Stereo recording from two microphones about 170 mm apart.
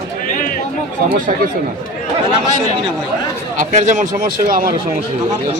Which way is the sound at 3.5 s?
50° right (ahead or behind).